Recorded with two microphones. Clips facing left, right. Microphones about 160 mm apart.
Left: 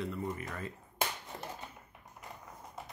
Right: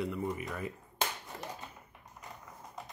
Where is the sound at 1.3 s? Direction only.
20° left (ahead or behind).